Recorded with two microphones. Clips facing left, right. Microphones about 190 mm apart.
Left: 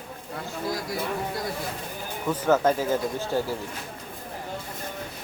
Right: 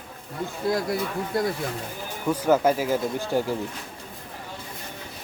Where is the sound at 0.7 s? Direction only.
55° right (ahead or behind).